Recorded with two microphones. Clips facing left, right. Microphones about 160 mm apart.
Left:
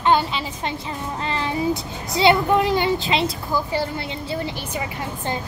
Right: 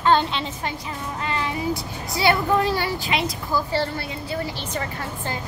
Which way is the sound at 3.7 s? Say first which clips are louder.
Even; 15° left (ahead or behind).